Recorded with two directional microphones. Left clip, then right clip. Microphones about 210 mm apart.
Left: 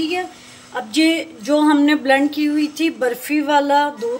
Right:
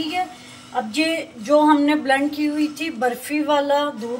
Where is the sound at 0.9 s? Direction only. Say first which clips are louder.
Left 8 dB; 55° left (ahead or behind).